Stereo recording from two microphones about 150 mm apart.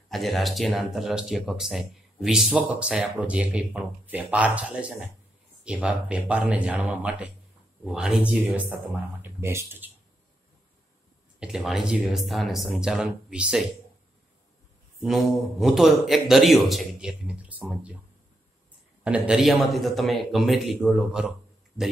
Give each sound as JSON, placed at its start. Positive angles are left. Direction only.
{"t": 0.1, "sound": "speech", "side_deg": 0}
{"t": 11.3, "sound": "speech", "side_deg": -5}
{"t": 15.0, "sound": "speech", "side_deg": 0}
{"t": 19.0, "sound": "speech", "side_deg": -5}